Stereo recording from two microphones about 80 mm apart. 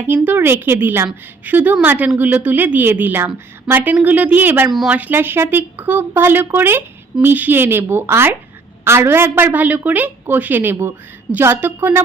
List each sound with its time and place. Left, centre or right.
0.1 s speech: right